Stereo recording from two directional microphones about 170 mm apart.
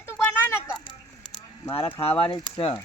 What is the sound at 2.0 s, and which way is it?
Speech, 35° left (ahead or behind).